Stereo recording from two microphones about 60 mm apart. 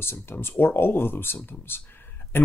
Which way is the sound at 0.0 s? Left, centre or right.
Left.